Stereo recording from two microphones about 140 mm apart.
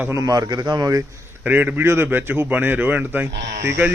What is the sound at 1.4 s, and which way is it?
A man's voice, 10° right (ahead or behind).